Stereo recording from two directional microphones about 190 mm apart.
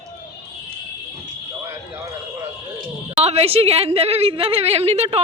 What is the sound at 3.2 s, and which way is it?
A woman's voice, 35° right (ahead or behind).